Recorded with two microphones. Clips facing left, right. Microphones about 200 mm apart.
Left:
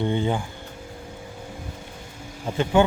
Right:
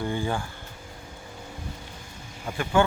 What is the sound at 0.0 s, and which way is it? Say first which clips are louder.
Speech: left 4 dB; 20° left (ahead or behind).